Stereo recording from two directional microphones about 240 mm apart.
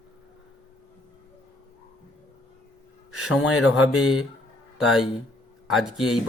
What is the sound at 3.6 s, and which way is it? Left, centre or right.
Speech, centre.